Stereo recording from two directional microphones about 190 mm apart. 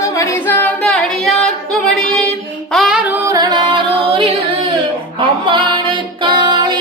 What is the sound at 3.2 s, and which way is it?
Music, 20° right (ahead or behind).